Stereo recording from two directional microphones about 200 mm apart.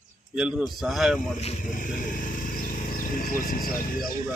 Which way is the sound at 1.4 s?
40° left (ahead or behind).